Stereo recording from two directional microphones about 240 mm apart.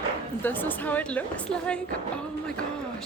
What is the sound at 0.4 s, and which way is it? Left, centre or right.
A woman's voice, centre.